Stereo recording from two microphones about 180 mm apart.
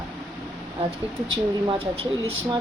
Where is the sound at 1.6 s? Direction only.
30° right (ahead or behind).